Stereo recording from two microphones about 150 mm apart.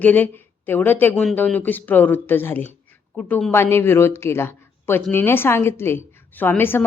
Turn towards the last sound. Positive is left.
turn(degrees=15)  # may be behind; listen again after turning